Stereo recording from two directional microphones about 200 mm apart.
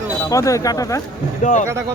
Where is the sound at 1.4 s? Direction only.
40° left (ahead or behind).